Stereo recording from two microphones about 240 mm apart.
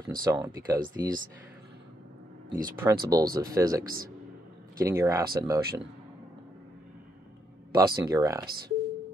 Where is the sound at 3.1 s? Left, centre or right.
Centre.